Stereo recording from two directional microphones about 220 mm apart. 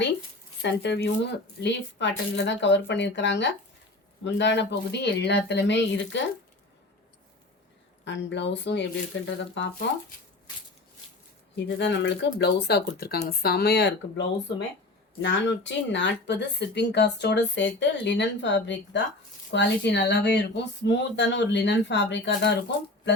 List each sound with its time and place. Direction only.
0.6 s speech: 55° left (ahead or behind)
8.0 s speech: 55° left (ahead or behind)
11.5 s speech: 50° left (ahead or behind)